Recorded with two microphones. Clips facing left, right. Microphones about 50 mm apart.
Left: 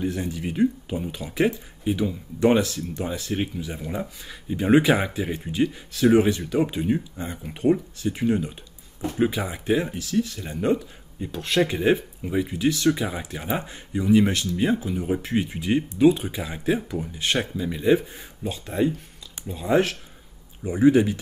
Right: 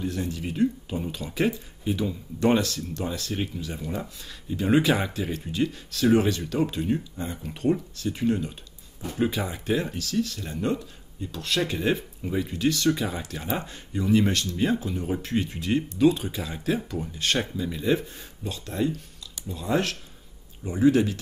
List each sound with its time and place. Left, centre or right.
0.0 s speech: centre